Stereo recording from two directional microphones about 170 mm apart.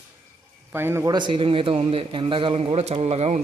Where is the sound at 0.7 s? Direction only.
15° right (ahead or behind).